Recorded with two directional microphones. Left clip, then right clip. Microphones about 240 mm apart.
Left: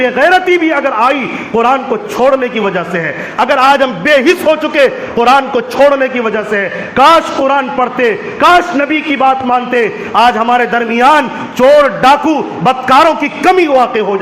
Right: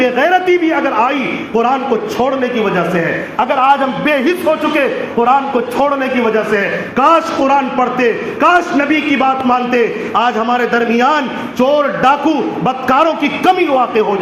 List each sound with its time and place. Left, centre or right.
0.0 s a man's voice: left